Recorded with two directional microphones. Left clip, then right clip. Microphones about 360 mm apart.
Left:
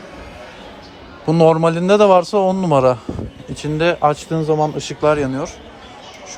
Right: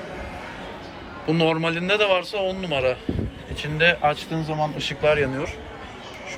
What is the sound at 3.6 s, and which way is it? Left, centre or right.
Speech, left.